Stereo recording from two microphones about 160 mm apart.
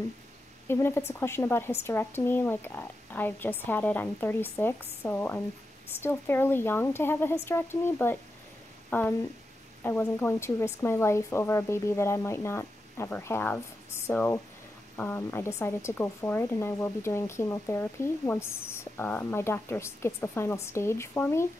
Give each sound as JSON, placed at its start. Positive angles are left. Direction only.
{"t": 0.7, "sound": "speech", "side_deg": 15}